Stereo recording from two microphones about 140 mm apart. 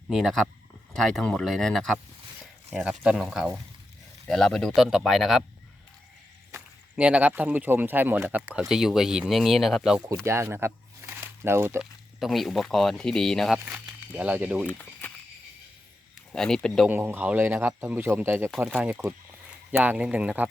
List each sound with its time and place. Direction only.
0.1 s speech: centre (ahead or behind)
2.6 s speech: 10° right (ahead or behind)
6.5 s speech: 10° right (ahead or behind)
10.2 s speech: 20° right (ahead or behind)
11.8 s speech: centre (ahead or behind)
14.7 s a sound: 15° left (ahead or behind)
16.3 s speech: 5° left (ahead or behind)
16.9 s speech: 15° right (ahead or behind)